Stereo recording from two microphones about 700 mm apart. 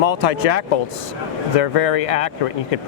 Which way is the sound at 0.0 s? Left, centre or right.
Left.